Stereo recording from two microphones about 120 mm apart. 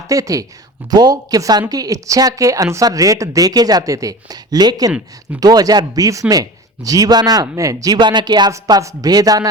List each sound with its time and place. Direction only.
0.1 s speech: 30° right (ahead or behind)
4.9 s speech: 5° right (ahead or behind)
5.4 s speech: 30° right (ahead or behind)